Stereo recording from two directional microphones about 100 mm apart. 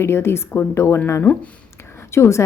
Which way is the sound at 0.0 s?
25° left (ahead or behind).